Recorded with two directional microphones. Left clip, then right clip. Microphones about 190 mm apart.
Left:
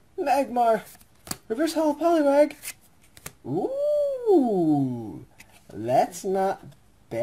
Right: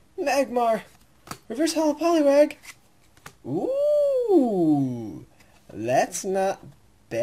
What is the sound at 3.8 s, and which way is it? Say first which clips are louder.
Theremin: right 4 dB; centre (ahead or behind).